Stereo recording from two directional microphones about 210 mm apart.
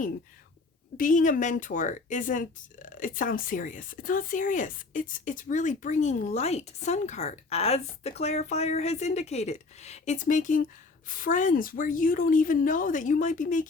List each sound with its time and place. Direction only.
0.9 s speech: 40° left (ahead or behind)